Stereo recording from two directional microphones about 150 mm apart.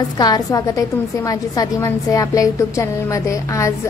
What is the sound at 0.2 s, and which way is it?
A woman's voice, 25° left (ahead or behind).